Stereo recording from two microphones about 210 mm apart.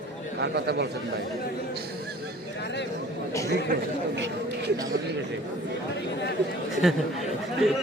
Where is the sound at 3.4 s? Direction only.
55° right (ahead or behind).